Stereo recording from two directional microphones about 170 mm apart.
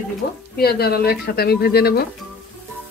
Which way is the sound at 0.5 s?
65° left (ahead or behind).